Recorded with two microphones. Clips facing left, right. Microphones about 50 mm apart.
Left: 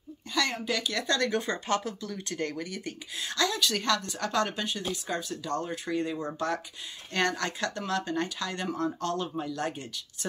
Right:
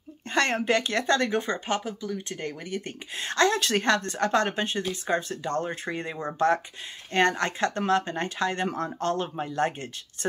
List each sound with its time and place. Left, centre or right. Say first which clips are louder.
0.3 s speech: right 6 dB; right; by 2.7 s centre
2.7 s a woman's voice: right 4 dB; right